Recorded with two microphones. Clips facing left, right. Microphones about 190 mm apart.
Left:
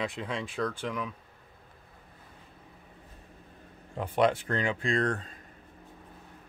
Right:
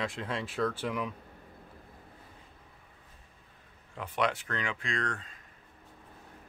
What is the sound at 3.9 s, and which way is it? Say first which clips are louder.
Speech: left 6 dB; 30° left (ahead or behind).